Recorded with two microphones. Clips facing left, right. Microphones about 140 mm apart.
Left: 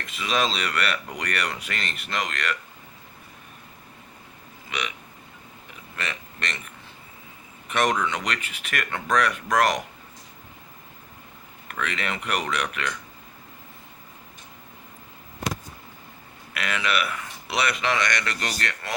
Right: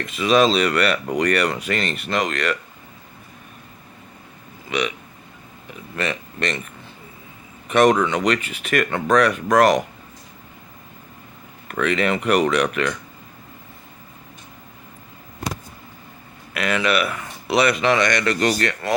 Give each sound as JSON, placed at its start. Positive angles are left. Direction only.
{"t": 0.2, "sound": "speech", "side_deg": -45}
{"t": 7.7, "sound": "speech", "side_deg": -45}
{"t": 11.7, "sound": "speech", "side_deg": -45}
{"t": 16.6, "sound": "speech", "side_deg": -45}
{"t": 18.2, "sound": "speech", "side_deg": -40}